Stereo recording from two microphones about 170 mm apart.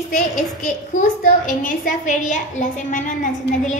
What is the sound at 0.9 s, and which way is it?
A woman's voice, 50° left (ahead or behind).